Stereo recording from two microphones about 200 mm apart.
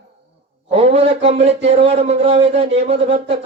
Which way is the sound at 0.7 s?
30° right (ahead or behind).